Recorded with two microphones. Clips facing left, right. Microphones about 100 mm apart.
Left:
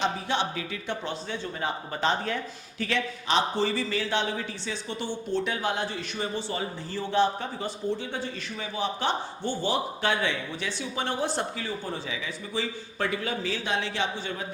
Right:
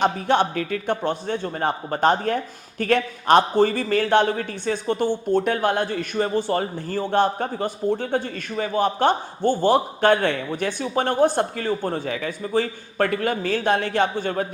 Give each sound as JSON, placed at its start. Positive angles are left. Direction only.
{"t": 0.0, "sound": "a man's voice", "side_deg": -55}